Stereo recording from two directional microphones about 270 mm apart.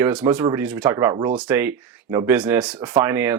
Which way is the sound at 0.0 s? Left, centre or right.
Centre.